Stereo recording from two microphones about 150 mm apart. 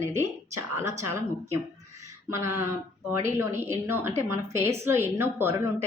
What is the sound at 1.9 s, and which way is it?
A woman's voice, 20° right (ahead or behind).